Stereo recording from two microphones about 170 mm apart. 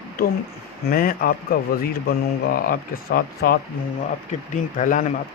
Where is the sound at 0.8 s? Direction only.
60° left (ahead or behind).